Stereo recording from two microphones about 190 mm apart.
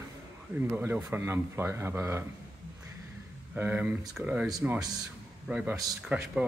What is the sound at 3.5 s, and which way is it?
Speech, 10° right (ahead or behind).